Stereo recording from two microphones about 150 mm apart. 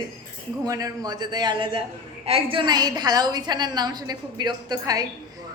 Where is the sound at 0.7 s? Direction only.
25° right (ahead or behind).